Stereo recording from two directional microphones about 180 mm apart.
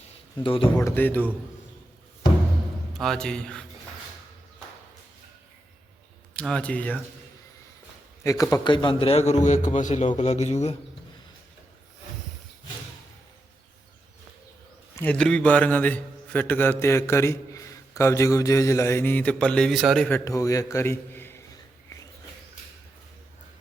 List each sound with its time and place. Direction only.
0.4 s speech: 30° left (ahead or behind)
0.8 s a man's voice: 15° left (ahead or behind)
2.9 s speech: centre (ahead or behind)
6.3 s a man's voice: 5° left (ahead or behind)
8.2 s a man's voice: 15° left (ahead or behind); by 10.8 s 40° left (ahead or behind)
14.9 s a man's voice: 10° left (ahead or behind)
20.1 s a man's voice: 15° left (ahead or behind)
21.9 s a sound: 20° left (ahead or behind)